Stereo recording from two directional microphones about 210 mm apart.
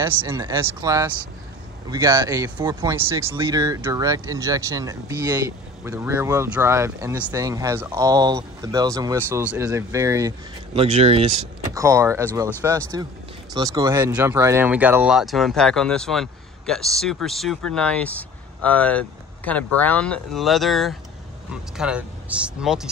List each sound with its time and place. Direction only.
0.0 s speech: 15° right (ahead or behind)
10.8 s speech: 30° right (ahead or behind)
11.7 s speech: 15° right (ahead or behind)